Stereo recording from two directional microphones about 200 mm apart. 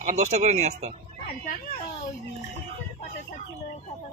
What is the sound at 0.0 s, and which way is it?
Speech, 35° right (ahead or behind).